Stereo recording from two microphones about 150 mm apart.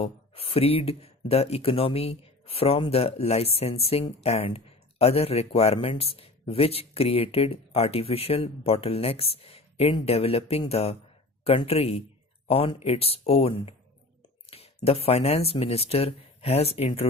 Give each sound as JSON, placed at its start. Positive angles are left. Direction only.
{"t": 0.0, "sound": "speech", "side_deg": 40}